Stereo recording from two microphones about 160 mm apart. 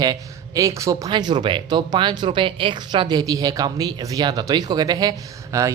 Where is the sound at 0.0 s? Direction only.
25° right (ahead or behind).